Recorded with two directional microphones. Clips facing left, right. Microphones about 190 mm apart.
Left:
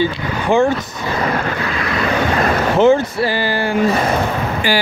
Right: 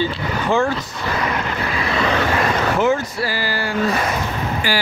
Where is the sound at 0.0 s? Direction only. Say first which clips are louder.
Left 3 dB; 15° left (ahead or behind).